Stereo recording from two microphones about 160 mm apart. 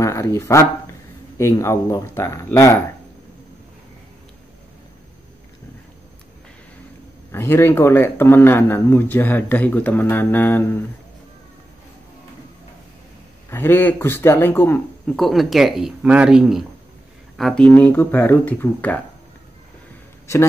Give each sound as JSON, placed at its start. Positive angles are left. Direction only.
{"t": 0.0, "sound": "speech", "side_deg": 15}
{"t": 7.3, "sound": "speech", "side_deg": 15}
{"t": 13.5, "sound": "speech", "side_deg": 15}
{"t": 15.1, "sound": "speech", "side_deg": 0}
{"t": 20.3, "sound": "speech", "side_deg": 20}